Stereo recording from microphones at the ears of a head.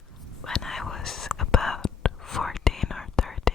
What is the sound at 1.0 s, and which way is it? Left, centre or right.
Whispering, left.